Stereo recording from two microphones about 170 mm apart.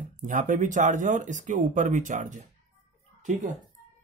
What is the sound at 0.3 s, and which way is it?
Speech, 45° right (ahead or behind).